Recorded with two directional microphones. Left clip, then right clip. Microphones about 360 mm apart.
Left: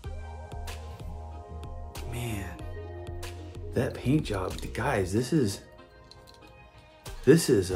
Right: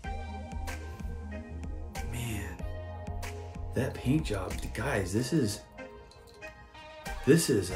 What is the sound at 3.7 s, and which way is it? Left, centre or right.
Speech, centre.